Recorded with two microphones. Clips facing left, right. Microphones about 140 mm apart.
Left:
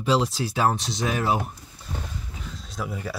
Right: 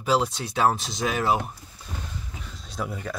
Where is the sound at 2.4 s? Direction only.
Centre (ahead or behind).